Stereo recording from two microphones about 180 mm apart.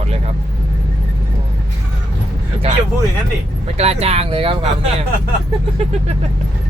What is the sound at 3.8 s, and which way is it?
Speech, 35° right (ahead or behind).